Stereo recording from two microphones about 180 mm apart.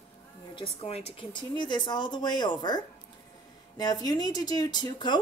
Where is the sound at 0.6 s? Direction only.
30° left (ahead or behind).